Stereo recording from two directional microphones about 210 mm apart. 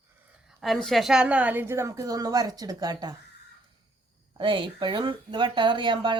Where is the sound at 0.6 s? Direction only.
Centre (ahead or behind); by 3.1 s 20° right (ahead or behind).